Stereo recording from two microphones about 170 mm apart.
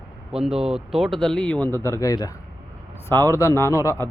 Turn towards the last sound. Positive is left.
turn(degrees=15)  # may be behind; listen again after turning